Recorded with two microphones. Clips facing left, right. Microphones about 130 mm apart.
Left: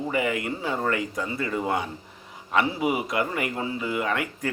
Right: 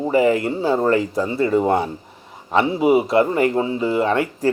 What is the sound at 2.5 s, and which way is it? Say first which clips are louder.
Speech: right 8 dB; 25° right (ahead or behind).